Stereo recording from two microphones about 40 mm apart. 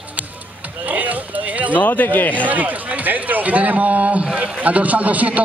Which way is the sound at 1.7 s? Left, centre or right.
Left.